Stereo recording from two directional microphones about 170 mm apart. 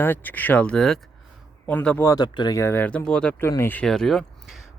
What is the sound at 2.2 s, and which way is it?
Speech, 25° left (ahead or behind).